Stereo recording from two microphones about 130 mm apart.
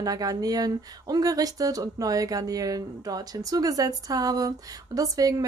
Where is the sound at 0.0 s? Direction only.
30° right (ahead or behind).